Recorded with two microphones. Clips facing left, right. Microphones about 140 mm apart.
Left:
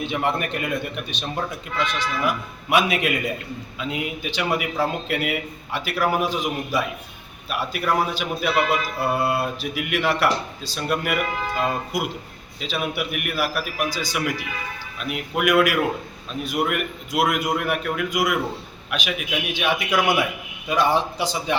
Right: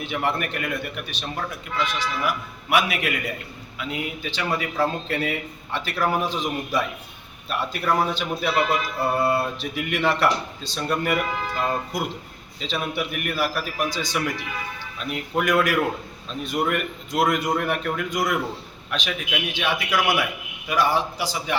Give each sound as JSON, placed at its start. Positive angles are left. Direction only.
{"t": 0.0, "sound": "a man's voice", "side_deg": 20}